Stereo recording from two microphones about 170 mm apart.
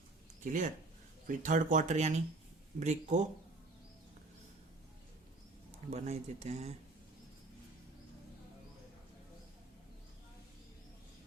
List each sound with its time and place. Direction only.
0.4 s speech: 45° right (ahead or behind)
5.9 s speech: 40° right (ahead or behind)